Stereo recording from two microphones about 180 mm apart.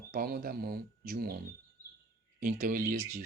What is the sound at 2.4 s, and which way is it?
Speech, 50° right (ahead or behind).